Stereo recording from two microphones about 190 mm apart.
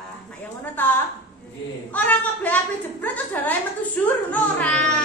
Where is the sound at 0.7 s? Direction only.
10° left (ahead or behind).